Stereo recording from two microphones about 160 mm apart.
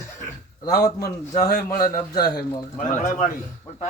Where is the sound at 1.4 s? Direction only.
70° left (ahead or behind).